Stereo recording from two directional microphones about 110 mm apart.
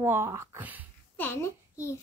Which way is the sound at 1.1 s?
20° left (ahead or behind).